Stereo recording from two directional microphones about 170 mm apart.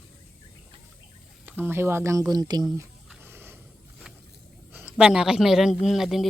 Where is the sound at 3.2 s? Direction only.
15° right (ahead or behind).